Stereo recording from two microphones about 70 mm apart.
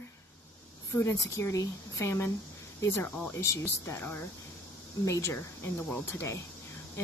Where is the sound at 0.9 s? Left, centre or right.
Left.